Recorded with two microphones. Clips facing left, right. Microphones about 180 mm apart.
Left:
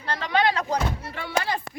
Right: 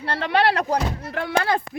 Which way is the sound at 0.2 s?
65° right (ahead or behind).